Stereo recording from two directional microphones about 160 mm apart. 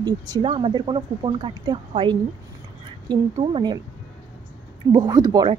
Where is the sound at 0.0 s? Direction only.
30° right (ahead or behind).